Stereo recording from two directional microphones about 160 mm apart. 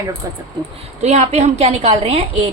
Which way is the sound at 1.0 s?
45° right (ahead or behind).